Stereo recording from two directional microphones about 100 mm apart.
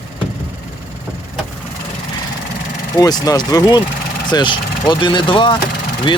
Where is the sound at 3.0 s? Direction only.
40° left (ahead or behind).